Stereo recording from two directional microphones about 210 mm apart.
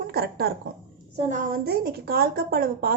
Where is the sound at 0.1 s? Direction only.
45° right (ahead or behind).